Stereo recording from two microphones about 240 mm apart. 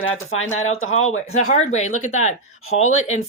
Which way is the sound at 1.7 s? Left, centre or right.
Left.